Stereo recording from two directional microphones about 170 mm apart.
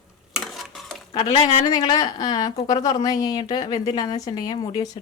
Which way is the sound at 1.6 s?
25° left (ahead or behind).